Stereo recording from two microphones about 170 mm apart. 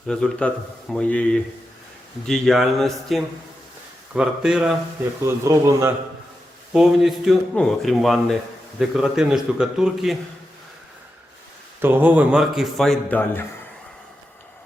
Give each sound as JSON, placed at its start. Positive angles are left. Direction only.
{"t": 0.1, "sound": "a man's voice", "side_deg": 5}
{"t": 5.2, "sound": "a man's voice", "side_deg": -20}
{"t": 6.7, "sound": "a man's voice", "side_deg": 0}
{"t": 11.8, "sound": "a man's voice", "side_deg": -10}